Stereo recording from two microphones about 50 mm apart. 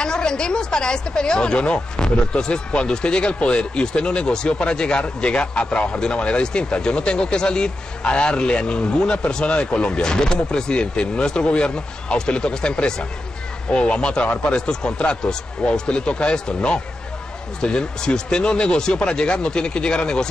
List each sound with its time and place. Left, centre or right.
0.0 s a woman's voice: centre